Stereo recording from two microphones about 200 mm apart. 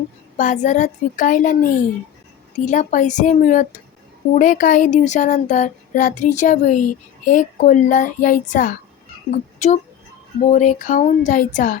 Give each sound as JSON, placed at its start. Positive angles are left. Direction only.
{"t": 0.3, "sound": "speech", "side_deg": 40}